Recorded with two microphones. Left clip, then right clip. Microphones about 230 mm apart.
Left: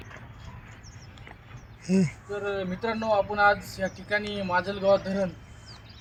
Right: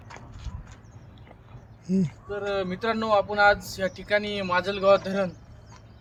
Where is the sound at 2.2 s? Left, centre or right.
Centre.